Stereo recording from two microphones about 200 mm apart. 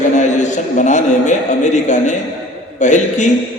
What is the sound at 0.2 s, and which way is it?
A man's voice, 35° left (ahead or behind).